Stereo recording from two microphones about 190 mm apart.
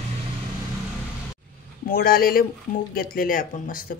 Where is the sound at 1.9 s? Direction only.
50° left (ahead or behind).